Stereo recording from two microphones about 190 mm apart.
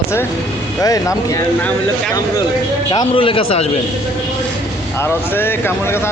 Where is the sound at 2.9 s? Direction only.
30° left (ahead or behind).